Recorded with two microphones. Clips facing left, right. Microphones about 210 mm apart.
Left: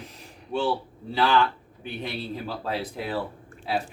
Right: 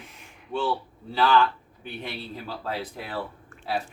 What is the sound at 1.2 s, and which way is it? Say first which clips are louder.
Speech: right 1 dB; 15° left (ahead or behind).